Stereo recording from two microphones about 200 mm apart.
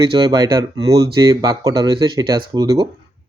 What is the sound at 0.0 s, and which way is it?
Speech, 20° right (ahead or behind).